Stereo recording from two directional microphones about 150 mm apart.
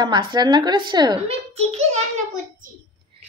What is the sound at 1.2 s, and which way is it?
Speech, 45° right (ahead or behind).